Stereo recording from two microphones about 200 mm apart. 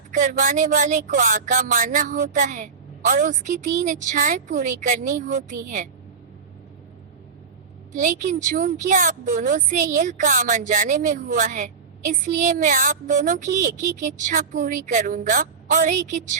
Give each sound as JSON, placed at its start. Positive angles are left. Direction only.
{"t": 0.1, "sound": "a woman's voice", "side_deg": -40}
{"t": 7.9, "sound": "a woman's voice", "side_deg": -40}